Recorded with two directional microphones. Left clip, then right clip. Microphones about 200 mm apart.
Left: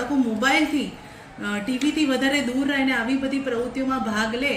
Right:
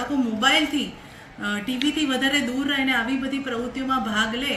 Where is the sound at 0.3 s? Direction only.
15° right (ahead or behind).